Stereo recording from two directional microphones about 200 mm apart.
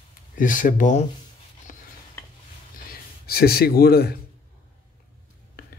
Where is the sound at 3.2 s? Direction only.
50° left (ahead or behind).